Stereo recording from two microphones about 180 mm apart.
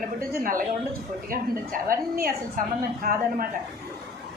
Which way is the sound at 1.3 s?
55° right (ahead or behind).